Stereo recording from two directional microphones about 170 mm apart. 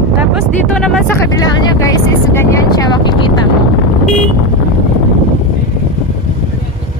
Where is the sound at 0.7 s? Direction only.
5° left (ahead or behind).